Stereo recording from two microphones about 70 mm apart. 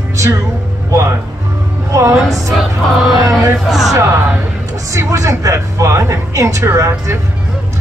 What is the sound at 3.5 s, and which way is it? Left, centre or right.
Speech, centre.